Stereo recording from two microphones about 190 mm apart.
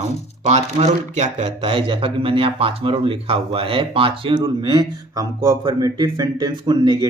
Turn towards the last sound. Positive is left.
turn(degrees=-25)  # may be behind; listen again after turning